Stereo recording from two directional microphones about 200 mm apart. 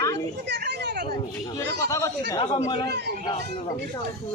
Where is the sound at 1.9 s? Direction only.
15° left (ahead or behind).